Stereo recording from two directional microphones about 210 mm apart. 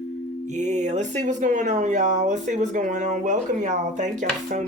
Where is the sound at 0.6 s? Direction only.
35° right (ahead or behind).